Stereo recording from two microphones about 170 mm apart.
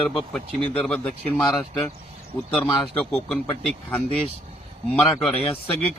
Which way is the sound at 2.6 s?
30° left (ahead or behind).